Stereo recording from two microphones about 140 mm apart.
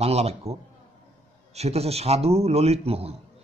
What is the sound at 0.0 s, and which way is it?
A man's voice, 50° right (ahead or behind).